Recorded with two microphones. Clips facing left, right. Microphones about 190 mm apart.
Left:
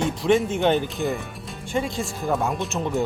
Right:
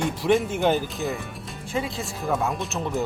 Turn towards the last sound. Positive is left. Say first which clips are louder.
# left 2 dB
turn(degrees=0)  # may be behind; listen again after turning